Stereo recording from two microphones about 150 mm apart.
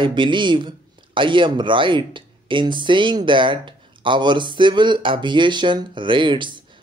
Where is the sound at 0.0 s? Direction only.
30° right (ahead or behind).